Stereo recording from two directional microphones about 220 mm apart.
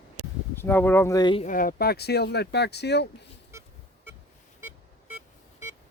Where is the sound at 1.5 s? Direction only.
40° left (ahead or behind).